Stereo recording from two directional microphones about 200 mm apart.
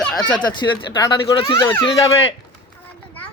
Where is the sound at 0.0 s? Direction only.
5° left (ahead or behind).